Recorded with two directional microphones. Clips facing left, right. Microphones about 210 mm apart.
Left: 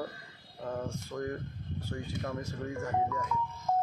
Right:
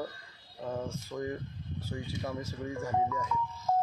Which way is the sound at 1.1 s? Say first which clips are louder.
Even; 5° right (ahead or behind).